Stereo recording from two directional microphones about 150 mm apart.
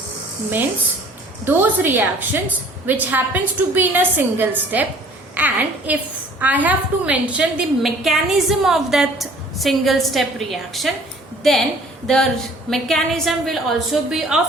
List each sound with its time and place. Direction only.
1.5 s a woman's voice: 10° right (ahead or behind)
12.0 s a woman's voice: 5° left (ahead or behind)